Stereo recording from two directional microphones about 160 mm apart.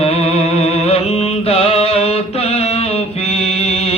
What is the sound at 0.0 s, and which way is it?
Music, 40° left (ahead or behind).